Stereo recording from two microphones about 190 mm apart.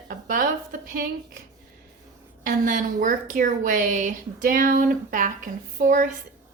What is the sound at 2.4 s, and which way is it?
A woman's voice, 45° right (ahead or behind).